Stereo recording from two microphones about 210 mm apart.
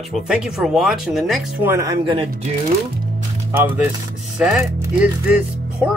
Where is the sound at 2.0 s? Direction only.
25° right (ahead or behind).